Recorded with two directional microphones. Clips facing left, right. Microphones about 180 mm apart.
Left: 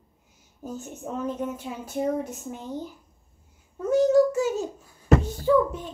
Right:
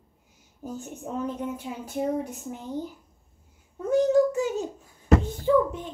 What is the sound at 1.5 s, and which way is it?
Speech, 15° right (ahead or behind).